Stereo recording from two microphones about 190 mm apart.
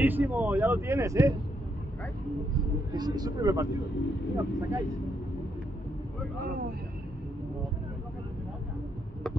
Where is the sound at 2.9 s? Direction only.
20° right (ahead or behind).